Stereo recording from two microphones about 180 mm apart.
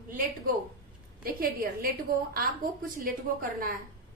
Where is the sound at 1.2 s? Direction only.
55° right (ahead or behind).